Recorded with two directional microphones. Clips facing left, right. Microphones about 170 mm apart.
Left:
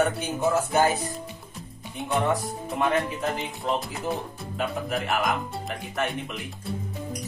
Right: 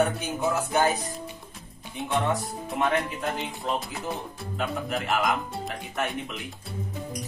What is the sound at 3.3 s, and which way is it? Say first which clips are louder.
Speech: left 2 dB; centre (ahead or behind).